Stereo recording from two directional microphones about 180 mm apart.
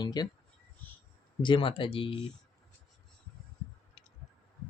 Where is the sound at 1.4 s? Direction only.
30° left (ahead or behind).